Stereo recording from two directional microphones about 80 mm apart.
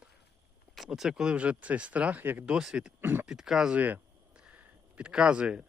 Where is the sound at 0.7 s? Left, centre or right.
Centre; by 2.4 s right.